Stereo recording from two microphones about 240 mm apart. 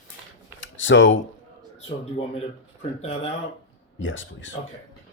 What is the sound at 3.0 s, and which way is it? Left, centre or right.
Speech, left.